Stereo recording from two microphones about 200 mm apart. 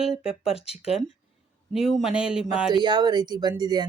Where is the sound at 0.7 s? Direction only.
5° right (ahead or behind).